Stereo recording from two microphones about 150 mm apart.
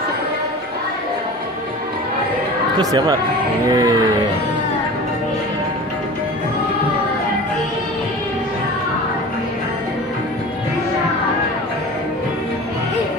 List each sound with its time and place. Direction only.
2.8 s speech: 25° right (ahead or behind)